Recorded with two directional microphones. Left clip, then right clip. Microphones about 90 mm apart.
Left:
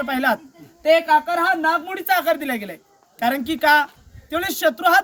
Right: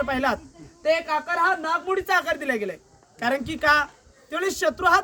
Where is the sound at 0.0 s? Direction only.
25° right (ahead or behind).